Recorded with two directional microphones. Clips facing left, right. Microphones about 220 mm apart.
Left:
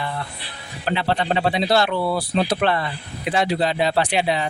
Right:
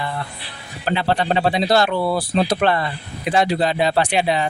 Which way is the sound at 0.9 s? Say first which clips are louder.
Right 2 dB; 40° right (ahead or behind).